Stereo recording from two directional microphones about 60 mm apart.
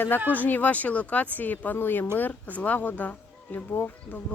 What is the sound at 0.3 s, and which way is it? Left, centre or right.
Speech, left.